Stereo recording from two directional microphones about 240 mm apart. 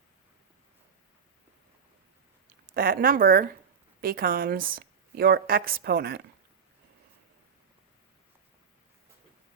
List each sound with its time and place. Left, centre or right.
2.7 s a woman's voice: right